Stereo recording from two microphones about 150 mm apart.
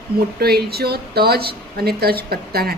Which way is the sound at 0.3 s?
90° right.